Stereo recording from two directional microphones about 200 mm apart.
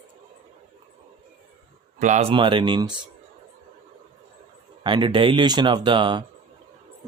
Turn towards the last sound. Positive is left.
turn(degrees=-25)  # may be behind; listen again after turning